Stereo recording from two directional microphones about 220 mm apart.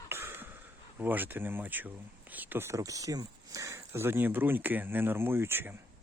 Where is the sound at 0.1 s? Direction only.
10° right (ahead or behind).